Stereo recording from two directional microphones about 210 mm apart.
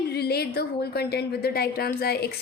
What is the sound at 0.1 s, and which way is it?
A woman's voice, 50° left (ahead or behind).